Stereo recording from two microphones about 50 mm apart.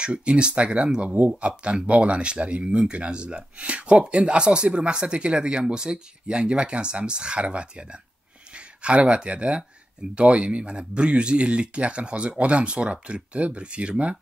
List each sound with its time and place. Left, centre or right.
0.0 s speech: right
8.8 s speech: right